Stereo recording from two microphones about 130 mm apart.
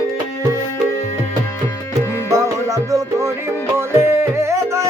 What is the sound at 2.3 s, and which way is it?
Music, 25° right (ahead or behind).